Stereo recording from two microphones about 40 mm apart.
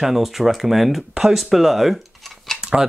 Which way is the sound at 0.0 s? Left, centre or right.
Centre.